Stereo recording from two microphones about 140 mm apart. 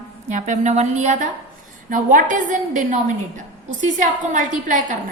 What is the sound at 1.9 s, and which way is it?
A woman's voice, 70° right (ahead or behind).